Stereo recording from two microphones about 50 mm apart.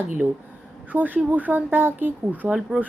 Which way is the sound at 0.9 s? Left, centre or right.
Right.